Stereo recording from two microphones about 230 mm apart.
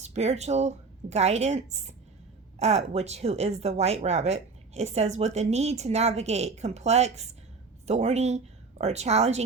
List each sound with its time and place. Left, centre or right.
0.0 s speech: right